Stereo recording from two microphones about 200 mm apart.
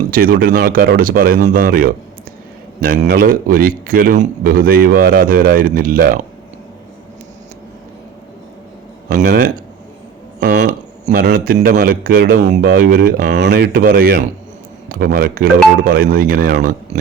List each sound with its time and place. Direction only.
0.1 s a man's voice: 45° right (ahead or behind)
9.1 s a man's voice: 45° right (ahead or behind)
10.4 s speech: 60° right (ahead or behind)
10.7 s a sound: 40° right (ahead or behind)
11.3 s a man's voice: 45° right (ahead or behind)